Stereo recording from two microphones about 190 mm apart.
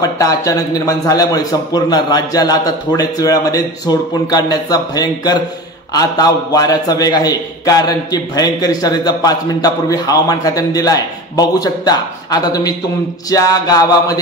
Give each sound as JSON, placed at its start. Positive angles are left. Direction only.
{"t": 0.0, "sound": "a man's voice", "side_deg": 15}